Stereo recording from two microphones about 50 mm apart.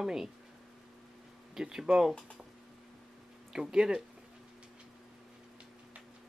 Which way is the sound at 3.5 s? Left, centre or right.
Centre.